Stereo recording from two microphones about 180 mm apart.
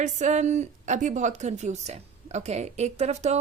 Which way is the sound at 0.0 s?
45° right (ahead or behind).